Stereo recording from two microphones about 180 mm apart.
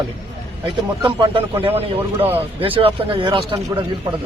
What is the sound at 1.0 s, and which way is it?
Speech, 25° right (ahead or behind).